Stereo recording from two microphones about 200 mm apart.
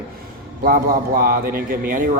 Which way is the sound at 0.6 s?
50° right (ahead or behind).